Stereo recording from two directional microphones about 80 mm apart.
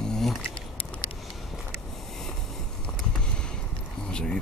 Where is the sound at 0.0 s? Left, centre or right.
Centre.